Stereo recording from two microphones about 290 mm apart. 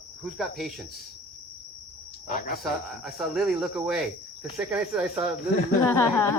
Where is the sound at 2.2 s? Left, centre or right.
Left.